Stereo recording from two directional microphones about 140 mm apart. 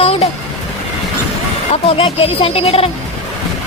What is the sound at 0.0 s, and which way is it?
Music, 45° left (ahead or behind).